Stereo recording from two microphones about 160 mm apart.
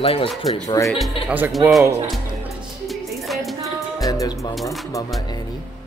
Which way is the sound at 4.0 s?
20° left (ahead or behind).